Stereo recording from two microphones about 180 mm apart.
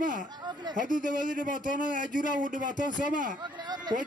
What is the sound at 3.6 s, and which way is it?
Speech, 20° right (ahead or behind).